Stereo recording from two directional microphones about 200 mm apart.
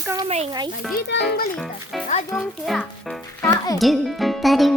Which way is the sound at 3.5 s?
15° left (ahead or behind).